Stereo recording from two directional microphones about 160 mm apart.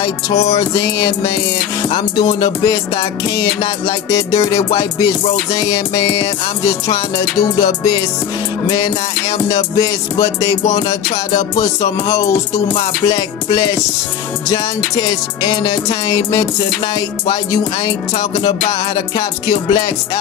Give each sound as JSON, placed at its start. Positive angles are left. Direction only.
{"t": 0.3, "sound": "music", "side_deg": 40}
{"t": 0.6, "sound": "music", "side_deg": 20}
{"t": 4.5, "sound": "music", "side_deg": 20}
{"t": 18.9, "sound": "music", "side_deg": 25}